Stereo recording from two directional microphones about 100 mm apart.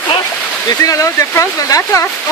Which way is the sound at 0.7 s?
35° left (ahead or behind).